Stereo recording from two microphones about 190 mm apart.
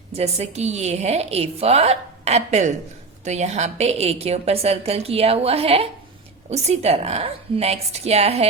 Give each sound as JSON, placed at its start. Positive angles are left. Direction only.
{"t": 0.1, "sound": "a woman's voice", "side_deg": -35}